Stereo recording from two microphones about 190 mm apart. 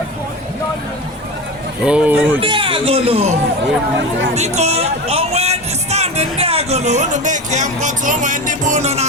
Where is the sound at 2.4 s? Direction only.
25° right (ahead or behind).